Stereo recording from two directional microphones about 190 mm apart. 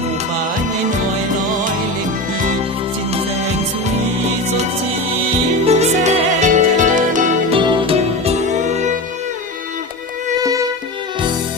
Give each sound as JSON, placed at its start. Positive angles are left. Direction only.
{"t": 5.6, "sound": "music", "side_deg": -35}
{"t": 7.5, "sound": "music", "side_deg": -25}